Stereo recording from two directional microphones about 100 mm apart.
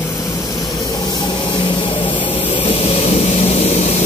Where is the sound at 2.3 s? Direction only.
90° left.